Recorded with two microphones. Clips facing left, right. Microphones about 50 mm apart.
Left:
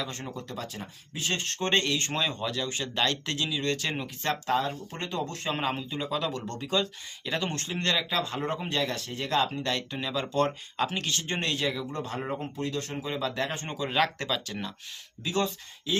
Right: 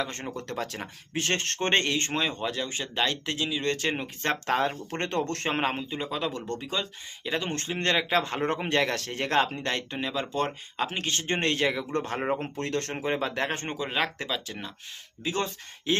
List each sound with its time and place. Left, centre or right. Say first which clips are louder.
0.0 s speech: right 3 dB; right
0.4 s speech: right 4 dB; right
1.6 s speech: right 1 dB; right
5.5 s speech: right 2 dB; right; by 7.5 s centre
7.5 s speech: right 2 dB; right
8.2 s speech: right 3 dB; right
10.0 s speech: left 3 dB; right
13.7 s speech: right 1 dB; right
13.9 s speech: left 4 dB; centre
15.2 s speech: left 1 dB; right